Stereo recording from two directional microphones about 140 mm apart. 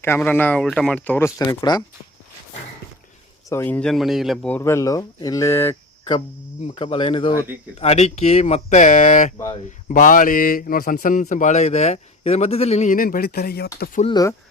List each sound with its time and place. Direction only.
0.0 s speech: 15° left (ahead or behind)
3.5 s speech: 15° left (ahead or behind); by 4.4 s centre (ahead or behind)
4.4 s speech: 15° left (ahead or behind)
6.7 s cricket: 40° left (ahead or behind)
7.8 s a man's voice: 50° left (ahead or behind)
12.9 s speech: 90° left
14.1 s speech: 25° left (ahead or behind)